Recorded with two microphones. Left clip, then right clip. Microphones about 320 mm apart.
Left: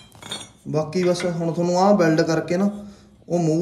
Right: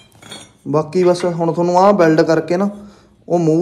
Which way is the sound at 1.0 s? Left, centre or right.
Centre.